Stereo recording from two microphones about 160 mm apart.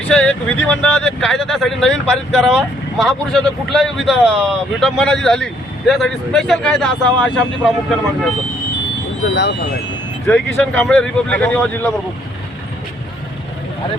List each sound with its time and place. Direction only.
0.1 s speech: 5° left (ahead or behind)
9.3 s speech: 90° left
10.2 s speech: 10° left (ahead or behind)